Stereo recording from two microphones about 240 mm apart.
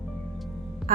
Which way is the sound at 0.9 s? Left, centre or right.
Right.